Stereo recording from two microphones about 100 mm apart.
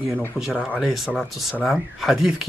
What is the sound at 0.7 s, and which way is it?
Speech, centre (ahead or behind).